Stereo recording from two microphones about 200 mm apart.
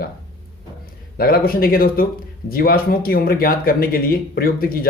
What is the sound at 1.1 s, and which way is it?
Speech, 50° left (ahead or behind).